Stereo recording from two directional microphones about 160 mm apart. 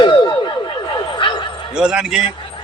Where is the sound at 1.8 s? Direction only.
5° right (ahead or behind).